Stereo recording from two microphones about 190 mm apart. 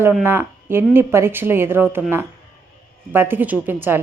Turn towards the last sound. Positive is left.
turn(degrees=-10)  # may be behind; listen again after turning